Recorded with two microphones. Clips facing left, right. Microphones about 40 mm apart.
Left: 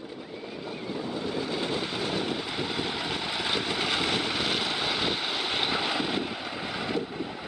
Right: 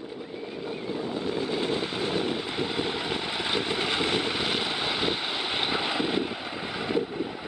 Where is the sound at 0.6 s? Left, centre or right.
Centre.